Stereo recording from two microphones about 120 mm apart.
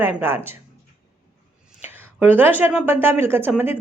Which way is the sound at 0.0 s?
15° right (ahead or behind).